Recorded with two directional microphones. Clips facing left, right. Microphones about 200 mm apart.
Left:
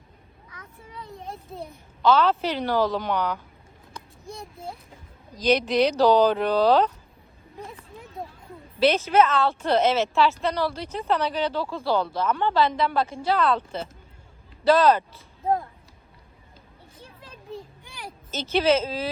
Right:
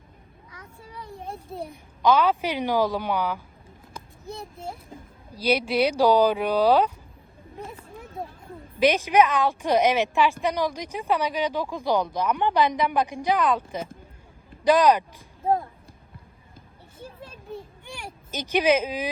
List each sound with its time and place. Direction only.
0.5 s a sound: 30° right (ahead or behind)
1.5 s speech: 15° right (ahead or behind)
5.3 s speech: 10° right (ahead or behind)
8.8 s speech: 15° right (ahead or behind)
18.3 s speech: 15° right (ahead or behind)